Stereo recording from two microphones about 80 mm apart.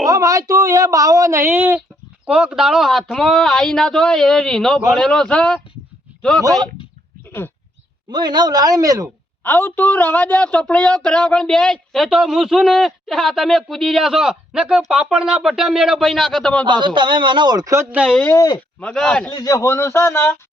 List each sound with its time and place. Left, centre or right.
0.0 s speech: right
2.2 s a man's voice: centre
8.1 s speech: right
9.4 s a man's voice: left; by 12.0 s centre
12.0 s speech: centre
16.6 s a man's voice: right
18.3 s a man's voice: left
18.8 s a man's voice: centre
19.3 s a man's voice: left
19.6 s a man's voice: left